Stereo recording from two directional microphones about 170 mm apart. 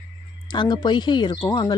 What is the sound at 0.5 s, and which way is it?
Speech, 25° left (ahead or behind).